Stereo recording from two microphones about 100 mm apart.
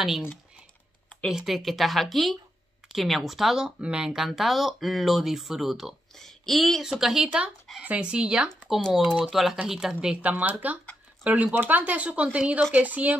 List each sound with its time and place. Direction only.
1.3 s speech: centre (ahead or behind)
9.9 s speech: 15° right (ahead or behind)